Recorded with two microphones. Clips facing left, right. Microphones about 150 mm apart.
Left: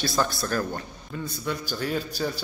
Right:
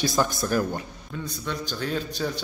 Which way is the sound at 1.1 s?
5° left (ahead or behind).